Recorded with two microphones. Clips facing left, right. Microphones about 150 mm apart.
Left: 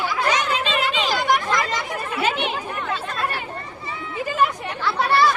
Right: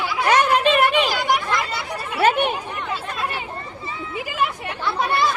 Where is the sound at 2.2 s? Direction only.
55° right (ahead or behind).